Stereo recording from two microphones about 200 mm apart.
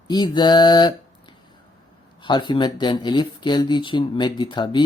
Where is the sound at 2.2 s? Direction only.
25° left (ahead or behind).